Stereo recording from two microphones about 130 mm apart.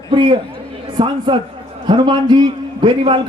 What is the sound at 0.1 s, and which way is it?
A man's voice, 40° right (ahead or behind).